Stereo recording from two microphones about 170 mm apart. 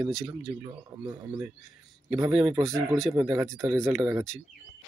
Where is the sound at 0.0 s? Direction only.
5° right (ahead or behind).